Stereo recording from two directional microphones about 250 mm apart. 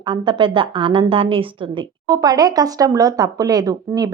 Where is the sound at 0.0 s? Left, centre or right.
Centre.